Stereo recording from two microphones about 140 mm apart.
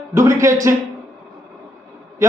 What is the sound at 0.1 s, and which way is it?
Speech, 20° right (ahead or behind).